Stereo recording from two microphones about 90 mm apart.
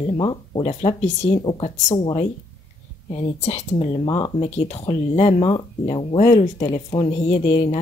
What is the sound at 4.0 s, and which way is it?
Speech, 50° left (ahead or behind).